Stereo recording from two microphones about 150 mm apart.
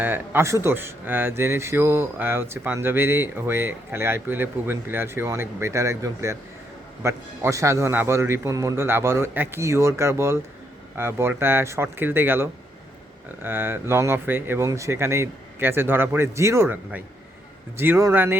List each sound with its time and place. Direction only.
0.0 s speech: 15° right (ahead or behind)